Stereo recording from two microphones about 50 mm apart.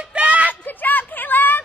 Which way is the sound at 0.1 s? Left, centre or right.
Right.